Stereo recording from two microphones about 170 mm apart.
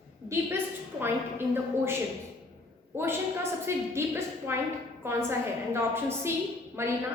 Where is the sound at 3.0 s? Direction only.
15° right (ahead or behind).